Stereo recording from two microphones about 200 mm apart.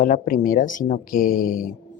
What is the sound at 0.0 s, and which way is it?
A woman's voice, 45° left (ahead or behind).